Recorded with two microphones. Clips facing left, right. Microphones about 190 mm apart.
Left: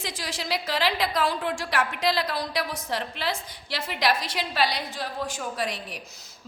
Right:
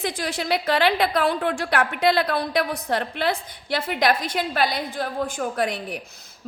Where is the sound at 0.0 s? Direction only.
55° right (ahead or behind).